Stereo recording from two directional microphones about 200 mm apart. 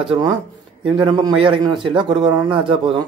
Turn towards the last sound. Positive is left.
turn(degrees=-25)  # may be behind; listen again after turning